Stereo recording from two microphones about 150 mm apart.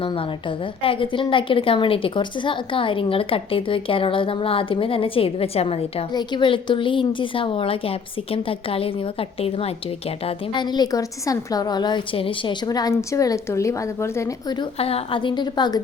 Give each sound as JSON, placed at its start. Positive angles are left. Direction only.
{"t": 0.0, "sound": "a woman's voice", "side_deg": 35}
{"t": 10.2, "sound": "a woman's voice", "side_deg": 30}